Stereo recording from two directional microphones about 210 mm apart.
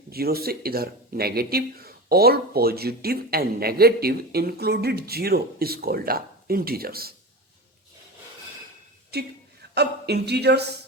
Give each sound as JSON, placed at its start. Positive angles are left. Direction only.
{"t": 0.1, "sound": "speech", "side_deg": -45}
{"t": 9.1, "sound": "speech", "side_deg": -50}